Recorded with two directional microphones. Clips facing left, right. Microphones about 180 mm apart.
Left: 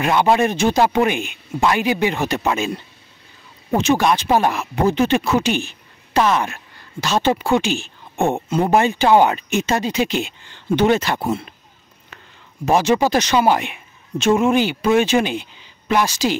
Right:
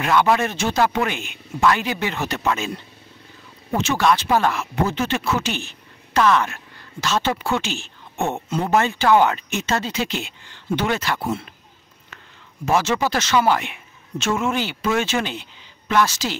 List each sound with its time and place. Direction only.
0.0 s speech: 20° left (ahead or behind)
3.7 s speech: 15° left (ahead or behind)
12.6 s speech: 15° left (ahead or behind)